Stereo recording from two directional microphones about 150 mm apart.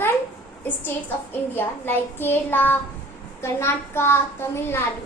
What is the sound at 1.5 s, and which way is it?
A woman's voice, 15° left (ahead or behind).